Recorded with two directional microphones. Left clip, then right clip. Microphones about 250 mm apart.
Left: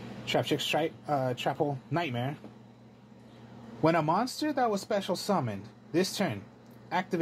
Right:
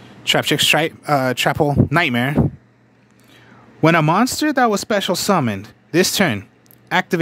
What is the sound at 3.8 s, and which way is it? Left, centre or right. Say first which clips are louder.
Speech: right 12 dB; right.